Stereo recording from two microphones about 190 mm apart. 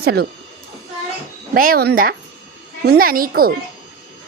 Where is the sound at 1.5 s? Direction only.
50° right (ahead or behind).